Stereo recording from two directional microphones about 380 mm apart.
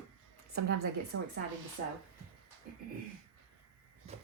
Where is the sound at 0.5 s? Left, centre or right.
Right.